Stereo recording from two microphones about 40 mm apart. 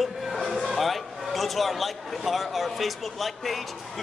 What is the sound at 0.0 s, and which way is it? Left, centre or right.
A man's voice, centre.